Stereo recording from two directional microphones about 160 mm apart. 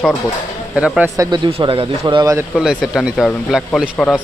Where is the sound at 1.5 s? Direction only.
35° right (ahead or behind).